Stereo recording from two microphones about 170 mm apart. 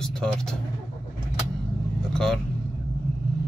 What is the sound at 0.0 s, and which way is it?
Speech, 5° left (ahead or behind).